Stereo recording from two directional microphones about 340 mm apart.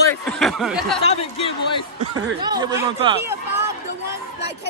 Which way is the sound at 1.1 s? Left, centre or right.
Centre.